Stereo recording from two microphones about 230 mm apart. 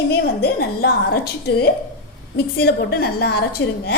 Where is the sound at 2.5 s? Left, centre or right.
Left.